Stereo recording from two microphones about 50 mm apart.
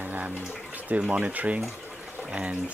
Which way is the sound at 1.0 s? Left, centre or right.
Right.